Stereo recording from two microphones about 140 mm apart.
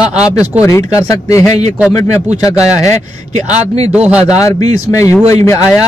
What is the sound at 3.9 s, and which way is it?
Speech, 10° right (ahead or behind).